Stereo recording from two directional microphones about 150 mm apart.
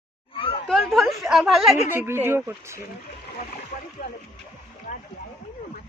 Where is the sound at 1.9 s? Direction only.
15° right (ahead or behind).